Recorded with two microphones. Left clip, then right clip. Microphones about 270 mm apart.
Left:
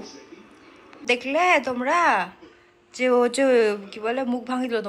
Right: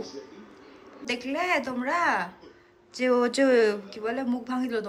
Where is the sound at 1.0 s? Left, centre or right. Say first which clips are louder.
Left 8 dB; centre.